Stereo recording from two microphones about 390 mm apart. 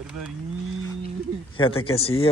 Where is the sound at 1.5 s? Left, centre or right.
Centre.